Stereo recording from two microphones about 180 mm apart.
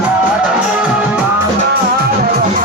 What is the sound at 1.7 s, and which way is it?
Music, 60° right (ahead or behind).